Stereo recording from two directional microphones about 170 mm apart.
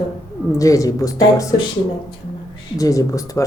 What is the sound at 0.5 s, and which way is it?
Speech, 20° left (ahead or behind).